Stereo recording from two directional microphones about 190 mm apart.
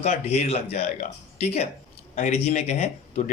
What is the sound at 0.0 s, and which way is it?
Speech, 35° left (ahead or behind).